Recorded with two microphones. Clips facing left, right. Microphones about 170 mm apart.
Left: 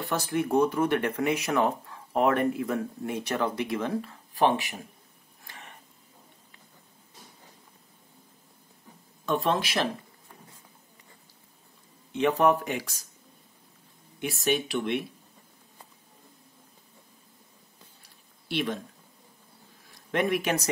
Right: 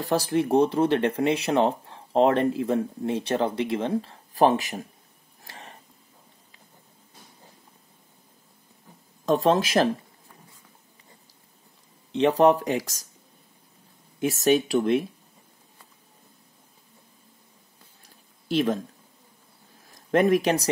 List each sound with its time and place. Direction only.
0.0 s speech: 35° right (ahead or behind)
5.4 s a sound: 35° right (ahead or behind)
9.2 s speech: 40° right (ahead or behind)
12.1 s speech: 35° right (ahead or behind)
14.2 s speech: 40° right (ahead or behind)
18.5 s speech: 40° right (ahead or behind)
19.9 s speech: 40° right (ahead or behind)